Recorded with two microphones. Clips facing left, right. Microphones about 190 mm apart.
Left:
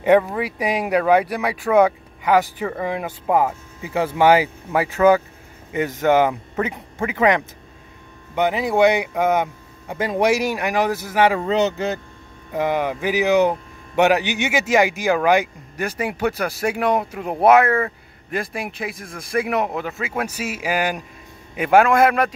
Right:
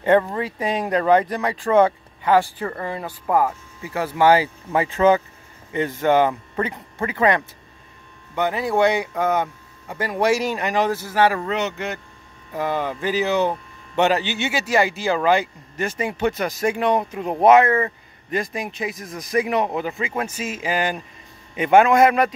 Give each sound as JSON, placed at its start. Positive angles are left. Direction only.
{"t": 0.2, "sound": "a man's voice", "side_deg": 10}
{"t": 11.5, "sound": "speech", "side_deg": 35}
{"t": 12.5, "sound": "a man's voice", "side_deg": 15}